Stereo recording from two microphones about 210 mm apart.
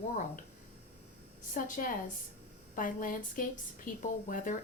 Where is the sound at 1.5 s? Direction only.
40° left (ahead or behind).